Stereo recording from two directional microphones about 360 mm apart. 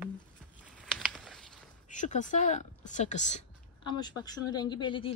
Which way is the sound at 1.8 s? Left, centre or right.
Left.